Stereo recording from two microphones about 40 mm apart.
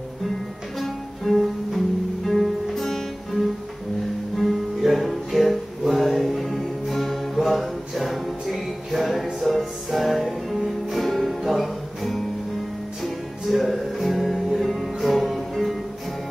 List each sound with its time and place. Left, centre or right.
0.7 s music: centre
4.4 s music: centre